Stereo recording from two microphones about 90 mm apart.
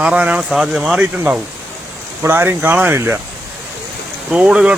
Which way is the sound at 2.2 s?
25° right (ahead or behind).